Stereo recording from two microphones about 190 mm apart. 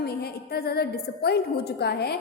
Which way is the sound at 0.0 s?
55° left (ahead or behind).